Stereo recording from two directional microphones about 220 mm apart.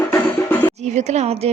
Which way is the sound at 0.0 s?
10° left (ahead or behind).